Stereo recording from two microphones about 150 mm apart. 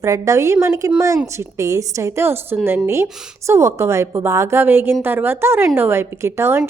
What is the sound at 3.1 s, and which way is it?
Speech, 5° right (ahead or behind).